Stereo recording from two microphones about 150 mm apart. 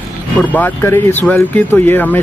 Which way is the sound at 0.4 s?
10° left (ahead or behind).